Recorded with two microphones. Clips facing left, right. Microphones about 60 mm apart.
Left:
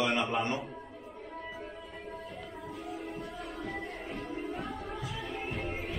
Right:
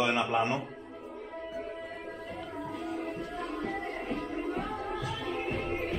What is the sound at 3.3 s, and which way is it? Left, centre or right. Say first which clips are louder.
Music: right 4 dB; right.